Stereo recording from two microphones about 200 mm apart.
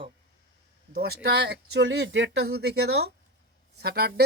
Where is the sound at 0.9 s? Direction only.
50° right (ahead or behind).